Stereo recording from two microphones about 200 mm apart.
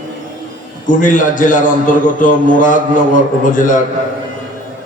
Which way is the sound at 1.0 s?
40° left (ahead or behind).